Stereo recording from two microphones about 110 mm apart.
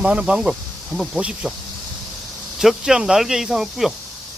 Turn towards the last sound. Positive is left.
turn(degrees=-5)  # may be behind; listen again after turning